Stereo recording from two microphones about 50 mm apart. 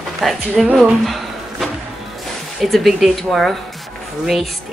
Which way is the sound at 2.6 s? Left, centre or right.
Centre.